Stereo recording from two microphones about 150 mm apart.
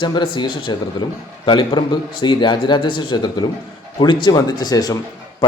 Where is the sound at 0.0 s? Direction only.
30° left (ahead or behind).